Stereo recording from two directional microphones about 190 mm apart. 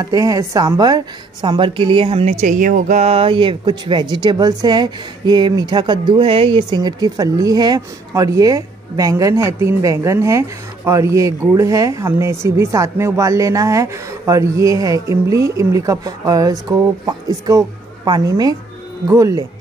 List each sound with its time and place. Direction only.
0.0 s speech: 20° right (ahead or behind)